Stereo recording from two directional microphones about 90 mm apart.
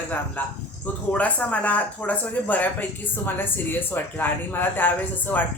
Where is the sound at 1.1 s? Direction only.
15° left (ahead or behind).